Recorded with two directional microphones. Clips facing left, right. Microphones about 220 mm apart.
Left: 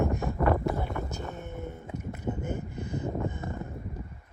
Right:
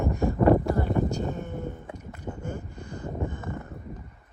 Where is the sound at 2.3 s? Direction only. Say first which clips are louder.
Even; 20° left (ahead or behind).